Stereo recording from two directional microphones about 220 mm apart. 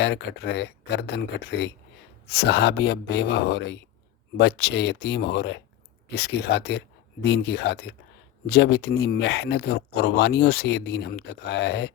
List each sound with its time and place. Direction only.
0.0 s speech: 50° left (ahead or behind)